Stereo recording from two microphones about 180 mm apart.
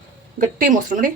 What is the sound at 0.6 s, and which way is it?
Speech, 50° right (ahead or behind).